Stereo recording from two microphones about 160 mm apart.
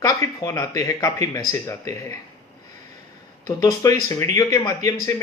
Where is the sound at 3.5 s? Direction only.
20° left (ahead or behind).